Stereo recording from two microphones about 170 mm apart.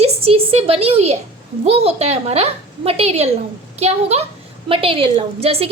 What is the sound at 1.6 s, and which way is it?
A woman's voice, 35° right (ahead or behind).